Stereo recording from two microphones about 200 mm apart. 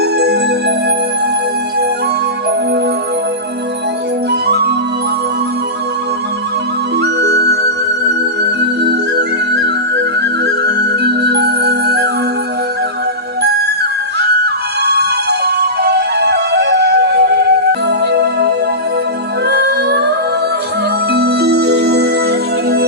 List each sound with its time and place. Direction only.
0.0 s music: 55° right (ahead or behind)
4.3 s music: 55° right (ahead or behind)
7.0 s music: 55° right (ahead or behind)
8.9 s music: 55° right (ahead or behind)
14.4 s music: 55° right (ahead or behind)